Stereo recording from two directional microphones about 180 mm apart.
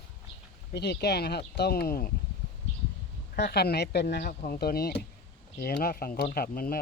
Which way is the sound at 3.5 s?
65° left (ahead or behind).